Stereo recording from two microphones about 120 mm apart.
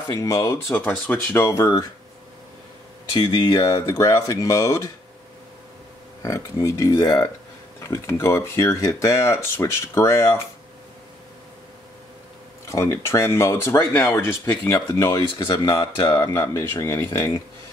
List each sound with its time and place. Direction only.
0.1 s speech: 25° left (ahead or behind)
3.1 s speech: 40° left (ahead or behind)
6.2 s speech: 25° left (ahead or behind)
8.1 s speech: 25° left (ahead or behind)
12.6 s speech: 25° left (ahead or behind)
16.7 s speech: 20° left (ahead or behind)